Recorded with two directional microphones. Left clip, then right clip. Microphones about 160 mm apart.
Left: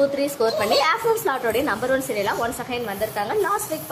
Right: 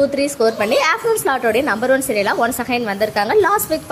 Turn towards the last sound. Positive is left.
turn(degrees=-35)  # may be behind; listen again after turning